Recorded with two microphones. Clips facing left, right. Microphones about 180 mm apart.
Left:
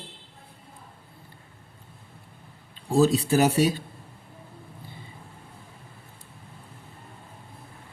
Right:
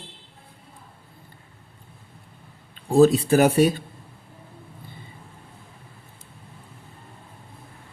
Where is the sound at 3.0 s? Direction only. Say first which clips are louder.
Right 4 dB; 55° right (ahead or behind).